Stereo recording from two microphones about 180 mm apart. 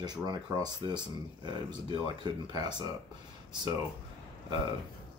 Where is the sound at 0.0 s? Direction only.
25° right (ahead or behind).